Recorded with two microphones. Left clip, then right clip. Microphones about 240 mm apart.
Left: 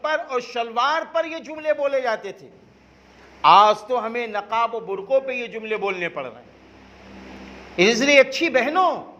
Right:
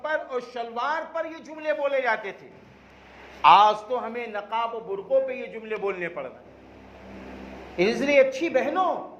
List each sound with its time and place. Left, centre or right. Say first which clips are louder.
0.0 s a man's voice: left 5 dB; left
3.4 s a man's voice: left 3 dB; left
7.8 s a man's voice: left 5 dB; left